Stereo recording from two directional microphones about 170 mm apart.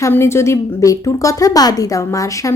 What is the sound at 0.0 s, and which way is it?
A woman's voice, 15° left (ahead or behind).